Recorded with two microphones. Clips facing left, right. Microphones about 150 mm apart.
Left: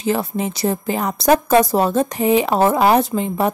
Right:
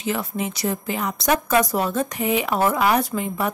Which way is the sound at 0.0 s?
35° left (ahead or behind).